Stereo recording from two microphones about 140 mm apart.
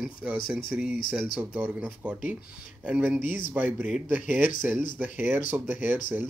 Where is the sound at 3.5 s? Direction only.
10° right (ahead or behind).